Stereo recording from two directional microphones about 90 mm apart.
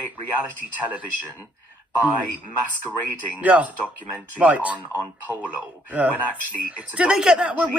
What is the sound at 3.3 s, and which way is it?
Speech, 15° right (ahead or behind).